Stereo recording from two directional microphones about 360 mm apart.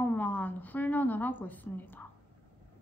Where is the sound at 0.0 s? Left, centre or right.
Centre.